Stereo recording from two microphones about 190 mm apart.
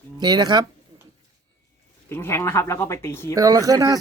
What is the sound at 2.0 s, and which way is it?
Speech, 10° left (ahead or behind).